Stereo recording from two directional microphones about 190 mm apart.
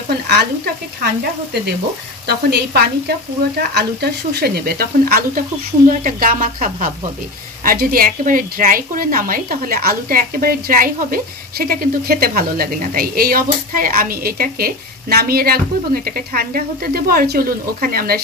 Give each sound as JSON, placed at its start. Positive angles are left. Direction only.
{"t": 2.2, "sound": "a woman's voice", "side_deg": -60}